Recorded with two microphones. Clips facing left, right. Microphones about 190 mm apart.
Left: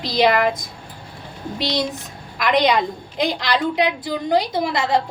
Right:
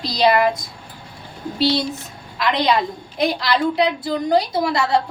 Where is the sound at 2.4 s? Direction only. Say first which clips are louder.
Left 1 dB; 20° left (ahead or behind).